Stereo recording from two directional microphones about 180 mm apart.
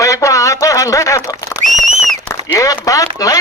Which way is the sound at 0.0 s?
15° left (ahead or behind).